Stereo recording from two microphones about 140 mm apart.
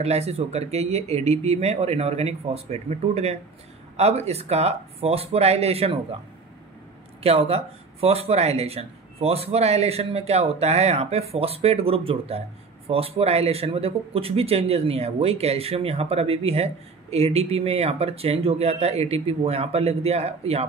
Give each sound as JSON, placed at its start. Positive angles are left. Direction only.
{"t": 0.0, "sound": "speech", "side_deg": -50}
{"t": 7.2, "sound": "speech", "side_deg": -45}